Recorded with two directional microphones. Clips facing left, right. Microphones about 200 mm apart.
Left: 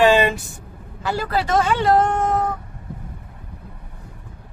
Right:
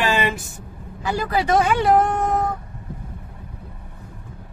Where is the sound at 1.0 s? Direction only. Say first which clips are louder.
Right 1 dB; 15° right (ahead or behind).